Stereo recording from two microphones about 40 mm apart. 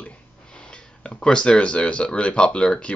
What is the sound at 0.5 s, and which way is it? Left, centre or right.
Sniff, left.